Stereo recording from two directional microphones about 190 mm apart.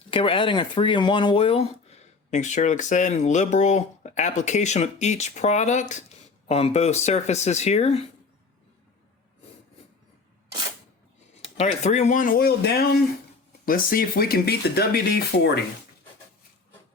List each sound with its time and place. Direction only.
0.1 s speech: 25° left (ahead or behind)
11.4 s speech: 35° left (ahead or behind); by 15.5 s 55° left (ahead or behind)